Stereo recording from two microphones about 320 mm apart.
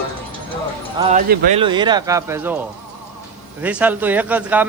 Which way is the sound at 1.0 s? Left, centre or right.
Right.